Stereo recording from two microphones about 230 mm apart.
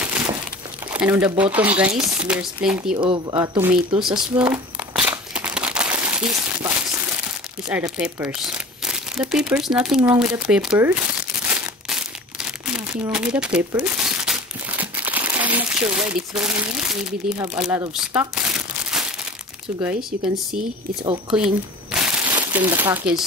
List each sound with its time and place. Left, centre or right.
0.0 s a sound: centre
0.9 s speech: centre
3.0 s speech: right
3.3 s speech: centre
4.9 s a sound: centre
7.6 s speech: centre
11.4 s crumpling: centre
17.9 s speech: centre
18.3 s crumpling: centre
19.8 s speech: centre
21.3 s crumpling: centre
22.5 s speech: centre